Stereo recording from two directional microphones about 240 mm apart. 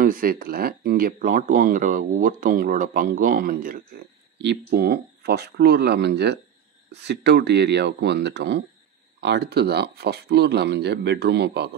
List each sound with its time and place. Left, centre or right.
0.0 s speech: right